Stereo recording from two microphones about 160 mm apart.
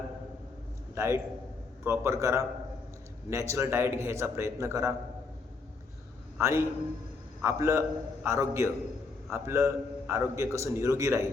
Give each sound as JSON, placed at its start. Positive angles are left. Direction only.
{"t": 0.9, "sound": "a man's voice", "side_deg": -15}
{"t": 6.4, "sound": "a man's voice", "side_deg": -15}